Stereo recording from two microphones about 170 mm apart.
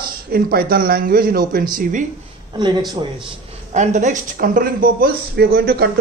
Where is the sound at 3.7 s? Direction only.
45° right (ahead or behind); by 5.8 s 65° right (ahead or behind).